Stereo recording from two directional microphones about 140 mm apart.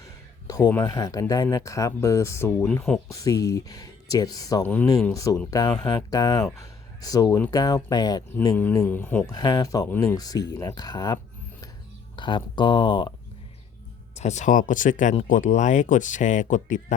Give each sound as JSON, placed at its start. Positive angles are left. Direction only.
{"t": 0.0, "sound": "a sound", "side_deg": 25}
{"t": 0.7, "sound": "speech", "side_deg": 20}
{"t": 2.6, "sound": "speech", "side_deg": 5}
{"t": 3.1, "sound": "speech", "side_deg": 25}
{"t": 4.6, "sound": "speech", "side_deg": 10}
{"t": 5.1, "sound": "speech", "side_deg": 25}
{"t": 8.5, "sound": "speech", "side_deg": 15}
{"t": 9.2, "sound": "speech", "side_deg": 25}
{"t": 14.2, "sound": "speech", "side_deg": 55}